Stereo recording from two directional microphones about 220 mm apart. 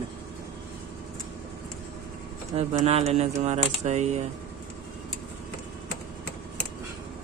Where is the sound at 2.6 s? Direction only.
30° right (ahead or behind).